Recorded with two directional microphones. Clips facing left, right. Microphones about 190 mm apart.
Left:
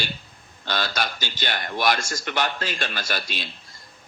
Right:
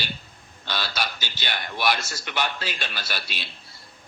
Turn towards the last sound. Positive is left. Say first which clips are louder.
# left 4 dB
turn(degrees=50)  # may be behind; listen again after turning